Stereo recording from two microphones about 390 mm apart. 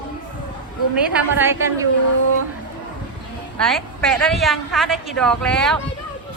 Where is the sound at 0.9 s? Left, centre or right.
Centre.